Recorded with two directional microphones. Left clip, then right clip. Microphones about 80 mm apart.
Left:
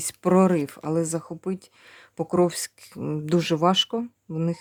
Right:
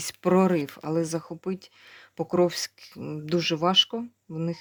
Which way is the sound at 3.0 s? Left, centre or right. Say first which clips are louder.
Left 2 dB; left.